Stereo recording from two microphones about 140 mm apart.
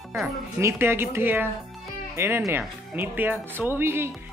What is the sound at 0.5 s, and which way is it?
Speech, 20° right (ahead or behind).